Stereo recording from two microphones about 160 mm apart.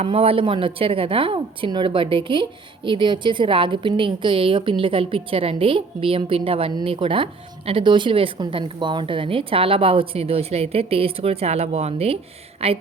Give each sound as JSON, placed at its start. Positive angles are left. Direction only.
{"t": 0.0, "sound": "speech", "side_deg": -35}